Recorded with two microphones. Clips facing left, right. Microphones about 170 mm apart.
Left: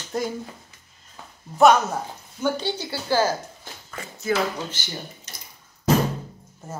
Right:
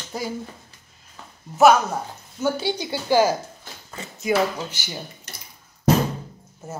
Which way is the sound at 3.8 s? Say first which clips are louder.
Right 2 dB; 25° right (ahead or behind).